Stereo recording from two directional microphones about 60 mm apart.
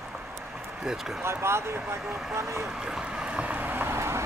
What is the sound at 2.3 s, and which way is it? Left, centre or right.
Speech, right.